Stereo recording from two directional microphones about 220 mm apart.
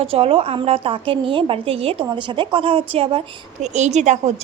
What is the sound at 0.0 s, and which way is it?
A woman's voice, 25° right (ahead or behind).